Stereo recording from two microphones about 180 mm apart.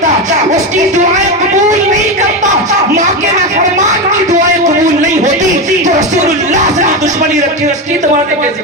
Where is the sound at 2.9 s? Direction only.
45° right (ahead or behind).